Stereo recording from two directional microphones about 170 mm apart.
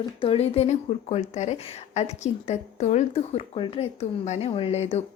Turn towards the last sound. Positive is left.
turn(degrees=40)  # may be behind; listen again after turning